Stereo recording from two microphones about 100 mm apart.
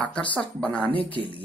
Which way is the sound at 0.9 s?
65° left (ahead or behind).